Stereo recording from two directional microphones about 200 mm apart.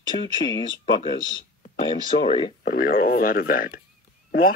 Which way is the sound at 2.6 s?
40° left (ahead or behind).